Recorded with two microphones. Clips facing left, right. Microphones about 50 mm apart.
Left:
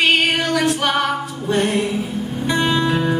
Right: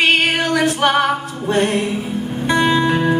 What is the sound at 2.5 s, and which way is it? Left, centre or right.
Music, centre.